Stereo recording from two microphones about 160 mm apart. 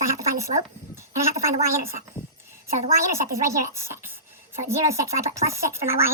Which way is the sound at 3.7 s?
15° right (ahead or behind).